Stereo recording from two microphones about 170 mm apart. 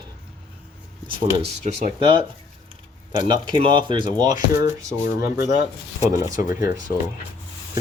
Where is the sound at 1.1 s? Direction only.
30° right (ahead or behind).